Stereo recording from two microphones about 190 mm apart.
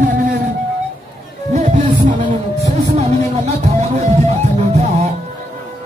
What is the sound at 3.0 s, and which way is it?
Music, 35° right (ahead or behind).